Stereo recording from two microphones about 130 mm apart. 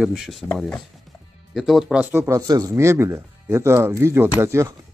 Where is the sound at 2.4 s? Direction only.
30° right (ahead or behind).